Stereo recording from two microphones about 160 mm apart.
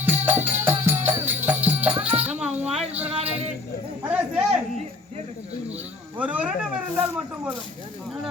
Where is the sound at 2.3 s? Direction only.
5° right (ahead or behind).